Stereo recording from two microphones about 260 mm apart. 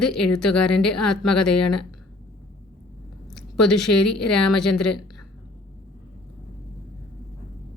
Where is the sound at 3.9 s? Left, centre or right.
Left.